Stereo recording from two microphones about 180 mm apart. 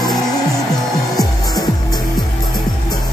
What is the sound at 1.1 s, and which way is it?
Music, 20° left (ahead or behind).